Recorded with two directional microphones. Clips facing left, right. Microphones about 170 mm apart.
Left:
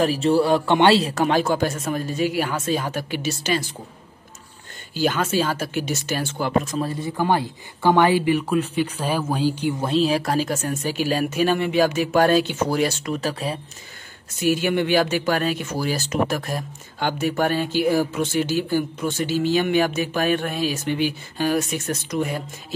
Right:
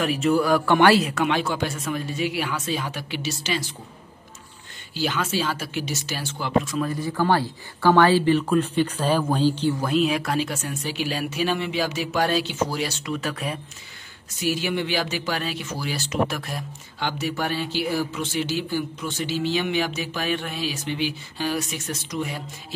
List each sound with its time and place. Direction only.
0.0 s speech: 35° left (ahead or behind); by 3.6 s 50° left (ahead or behind)
4.9 s speech: 50° left (ahead or behind)
6.9 s speech: 25° left (ahead or behind)
9.8 s speech: 30° left (ahead or behind)
14.3 s speech: 50° left (ahead or behind)